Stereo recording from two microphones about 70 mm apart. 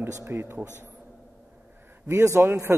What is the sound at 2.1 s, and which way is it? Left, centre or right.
Speech, right.